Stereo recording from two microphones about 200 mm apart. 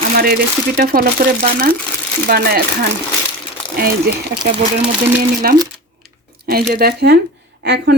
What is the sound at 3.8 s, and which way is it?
Speech, 50° right (ahead or behind).